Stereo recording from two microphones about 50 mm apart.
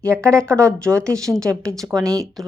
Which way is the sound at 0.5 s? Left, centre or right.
Right.